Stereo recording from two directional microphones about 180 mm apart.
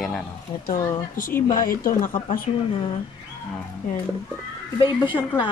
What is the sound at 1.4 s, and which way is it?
Speech, 50° left (ahead or behind).